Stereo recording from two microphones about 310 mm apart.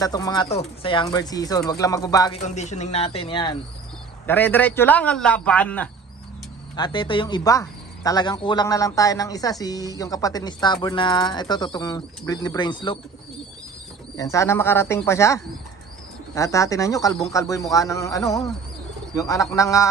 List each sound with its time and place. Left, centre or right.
0.0 s a man's voice: centre
6.7 s speech: centre
14.1 s speech: centre